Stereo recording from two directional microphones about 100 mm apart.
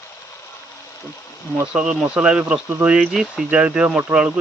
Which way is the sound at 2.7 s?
20° right (ahead or behind).